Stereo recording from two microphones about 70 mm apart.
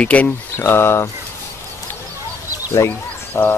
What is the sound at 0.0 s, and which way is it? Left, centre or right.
Speech, left.